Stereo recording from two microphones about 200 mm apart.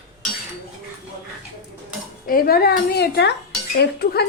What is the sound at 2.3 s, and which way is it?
Speech, 50° left (ahead or behind).